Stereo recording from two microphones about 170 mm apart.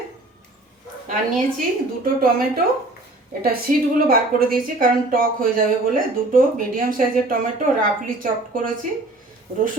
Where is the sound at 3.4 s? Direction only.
60° right (ahead or behind).